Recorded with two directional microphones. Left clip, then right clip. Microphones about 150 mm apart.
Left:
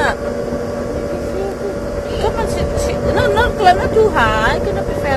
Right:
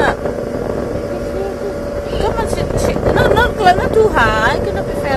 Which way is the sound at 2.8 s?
50° right (ahead or behind).